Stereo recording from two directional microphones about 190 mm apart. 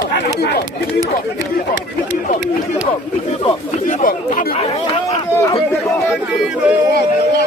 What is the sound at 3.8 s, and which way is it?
Speech, 45° left (ahead or behind).